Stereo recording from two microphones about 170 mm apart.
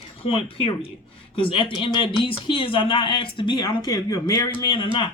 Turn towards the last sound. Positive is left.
turn(degrees=30)  # may be behind; listen again after turning